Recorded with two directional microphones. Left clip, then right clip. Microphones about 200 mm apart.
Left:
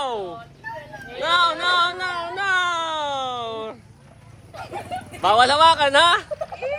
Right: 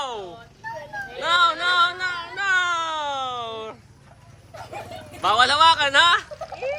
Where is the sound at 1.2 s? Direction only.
10° right (ahead or behind).